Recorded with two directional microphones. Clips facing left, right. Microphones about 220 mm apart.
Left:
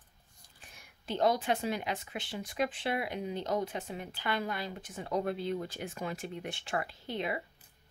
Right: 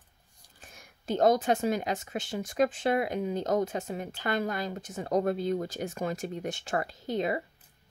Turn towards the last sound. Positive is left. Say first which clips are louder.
# right 6 dB
turn(degrees=-40)  # may be behind; listen again after turning